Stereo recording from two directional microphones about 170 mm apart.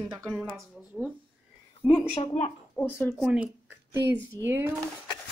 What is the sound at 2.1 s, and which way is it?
Speech, 40° left (ahead or behind).